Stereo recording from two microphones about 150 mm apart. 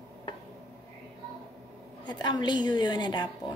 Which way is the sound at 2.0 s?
30° left (ahead or behind).